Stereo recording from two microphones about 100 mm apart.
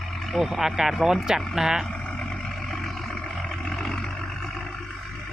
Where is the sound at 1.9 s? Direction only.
10° left (ahead or behind).